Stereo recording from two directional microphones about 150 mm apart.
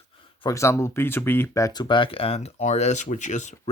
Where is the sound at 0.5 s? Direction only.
20° left (ahead or behind).